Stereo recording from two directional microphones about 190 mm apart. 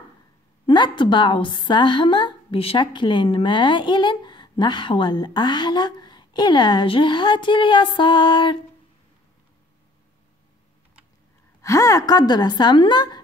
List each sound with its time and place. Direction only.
0.7 s a woman's voice: 25° left (ahead or behind)
11.6 s a woman's voice: 15° left (ahead or behind)